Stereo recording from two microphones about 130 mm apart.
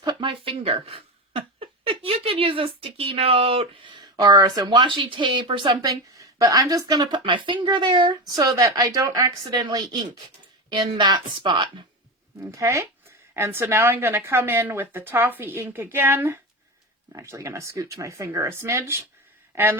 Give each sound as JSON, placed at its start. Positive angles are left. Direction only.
{"t": 0.0, "sound": "speech", "side_deg": -35}
{"t": 12.4, "sound": "a woman's voice", "side_deg": -25}